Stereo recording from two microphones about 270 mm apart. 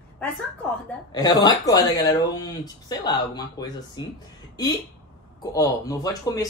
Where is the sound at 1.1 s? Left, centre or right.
Centre.